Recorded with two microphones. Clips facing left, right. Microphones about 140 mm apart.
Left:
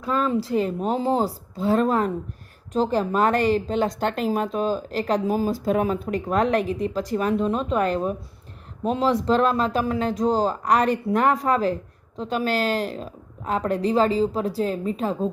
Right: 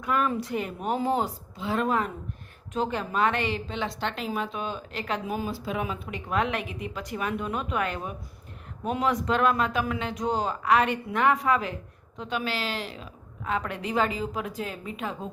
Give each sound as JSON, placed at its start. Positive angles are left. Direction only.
{"t": 0.0, "sound": "speech", "side_deg": 30}